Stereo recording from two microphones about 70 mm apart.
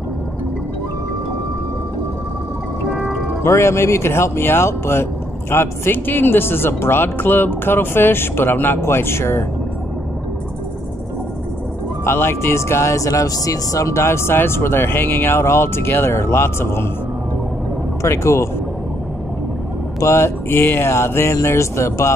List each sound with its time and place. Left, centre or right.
2.9 s music: centre
3.4 s speech: left
12.0 s speech: left
18.0 s speech: left
20.0 s speech: left